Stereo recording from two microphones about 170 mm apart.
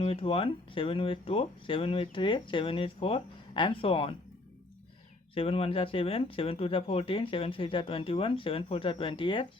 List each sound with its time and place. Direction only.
0.0 s speech: 35° left (ahead or behind)
5.3 s speech: 35° left (ahead or behind)